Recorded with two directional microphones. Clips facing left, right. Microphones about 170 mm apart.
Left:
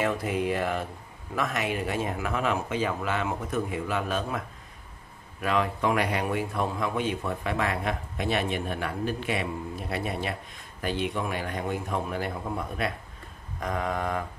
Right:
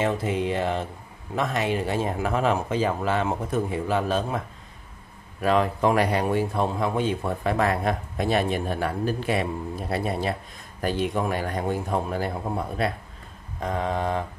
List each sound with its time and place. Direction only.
0.0 s a man's voice: 25° right (ahead or behind)
5.4 s a man's voice: 35° right (ahead or behind)